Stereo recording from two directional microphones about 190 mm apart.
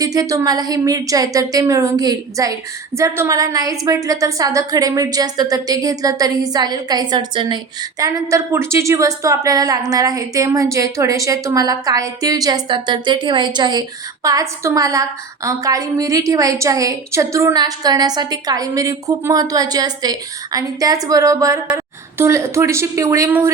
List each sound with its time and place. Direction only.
0.0 s a woman's voice: 20° right (ahead or behind)